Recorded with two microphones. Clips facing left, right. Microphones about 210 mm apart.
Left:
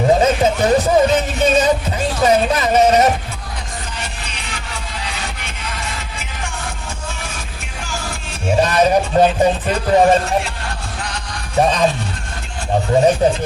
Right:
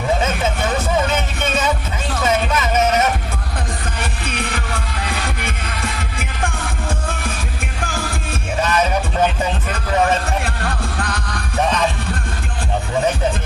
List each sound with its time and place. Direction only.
0.1 s music: 35° left (ahead or behind)
4.0 s music: 55° right (ahead or behind)
7.8 s music: 55° right (ahead or behind)
8.6 s music: 35° left (ahead or behind)
10.2 s music: 55° right (ahead or behind)
11.6 s music: 35° left (ahead or behind)
12.9 s music: 35° left (ahead or behind)